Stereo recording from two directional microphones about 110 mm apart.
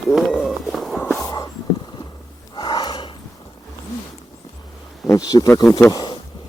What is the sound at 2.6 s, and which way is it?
Snort, 40° left (ahead or behind).